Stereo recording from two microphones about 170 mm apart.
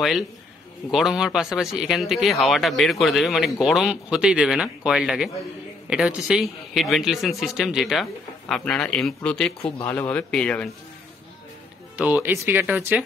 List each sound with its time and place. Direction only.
0.9 s speech: 5° right (ahead or behind)
12.0 s speech: 10° right (ahead or behind)